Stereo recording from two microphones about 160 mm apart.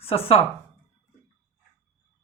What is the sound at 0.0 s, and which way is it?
Speech, 40° left (ahead or behind).